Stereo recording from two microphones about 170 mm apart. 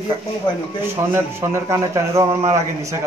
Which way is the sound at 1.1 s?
15° right (ahead or behind).